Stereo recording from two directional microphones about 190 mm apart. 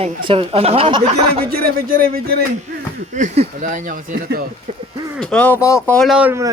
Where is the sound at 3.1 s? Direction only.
40° right (ahead or behind).